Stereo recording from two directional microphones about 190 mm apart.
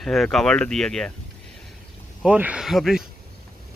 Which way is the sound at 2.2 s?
5° right (ahead or behind).